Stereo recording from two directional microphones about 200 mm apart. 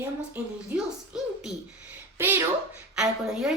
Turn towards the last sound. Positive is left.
turn(degrees=-5)  # may be behind; listen again after turning